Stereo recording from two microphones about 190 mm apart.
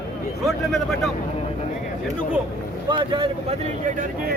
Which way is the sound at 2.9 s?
25° right (ahead or behind).